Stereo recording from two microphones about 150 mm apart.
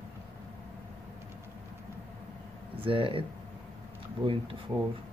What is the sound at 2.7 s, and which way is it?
Speech, 35° right (ahead or behind).